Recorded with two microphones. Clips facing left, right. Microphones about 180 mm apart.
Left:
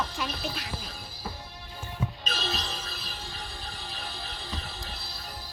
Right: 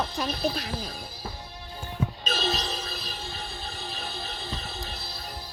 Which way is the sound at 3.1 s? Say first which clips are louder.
Right 3 dB; 25° right (ahead or behind).